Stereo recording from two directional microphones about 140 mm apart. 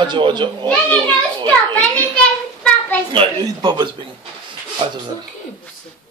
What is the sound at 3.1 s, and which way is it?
Speech, 35° right (ahead or behind).